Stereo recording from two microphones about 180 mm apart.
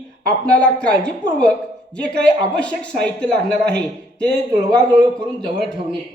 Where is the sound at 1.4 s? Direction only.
5° left (ahead or behind).